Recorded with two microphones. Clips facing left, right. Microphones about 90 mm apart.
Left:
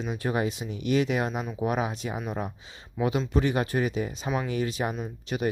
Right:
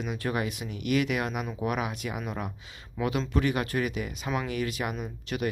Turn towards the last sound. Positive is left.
turn(degrees=20)  # may be behind; listen again after turning